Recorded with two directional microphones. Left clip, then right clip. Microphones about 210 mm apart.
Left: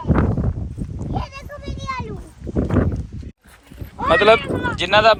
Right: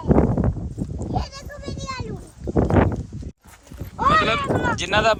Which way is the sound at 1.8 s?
45° left (ahead or behind).